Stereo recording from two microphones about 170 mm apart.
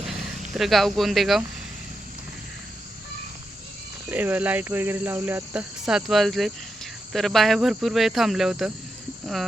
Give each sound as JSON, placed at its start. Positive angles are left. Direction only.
{"t": 0.5, "sound": "speech", "side_deg": 0}
{"t": 4.1, "sound": "cricket", "side_deg": -10}
{"t": 7.1, "sound": "speech", "side_deg": 0}